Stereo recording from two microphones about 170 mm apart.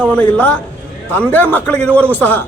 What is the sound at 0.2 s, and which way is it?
A man's voice, 10° left (ahead or behind).